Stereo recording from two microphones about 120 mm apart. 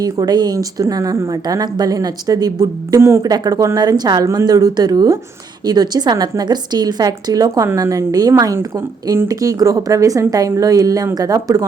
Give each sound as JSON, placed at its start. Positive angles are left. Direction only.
{"t": 0.0, "sound": "speech", "side_deg": -35}